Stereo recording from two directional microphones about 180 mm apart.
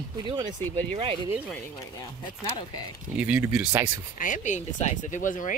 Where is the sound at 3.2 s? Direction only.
5° right (ahead or behind).